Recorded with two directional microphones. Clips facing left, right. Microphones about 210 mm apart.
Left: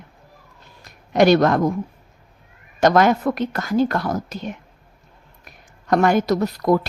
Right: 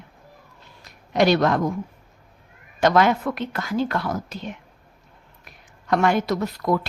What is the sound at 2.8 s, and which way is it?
A woman's voice, 45° left (ahead or behind).